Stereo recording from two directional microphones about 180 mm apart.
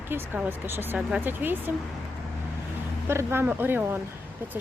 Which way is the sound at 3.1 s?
15° right (ahead or behind).